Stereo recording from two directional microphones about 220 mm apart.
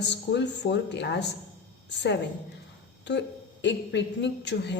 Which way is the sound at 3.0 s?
50° left (ahead or behind).